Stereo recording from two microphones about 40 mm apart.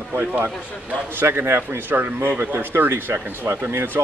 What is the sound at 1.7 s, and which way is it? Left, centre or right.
A man's voice, right.